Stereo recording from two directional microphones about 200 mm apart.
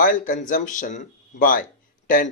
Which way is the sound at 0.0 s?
40° left (ahead or behind).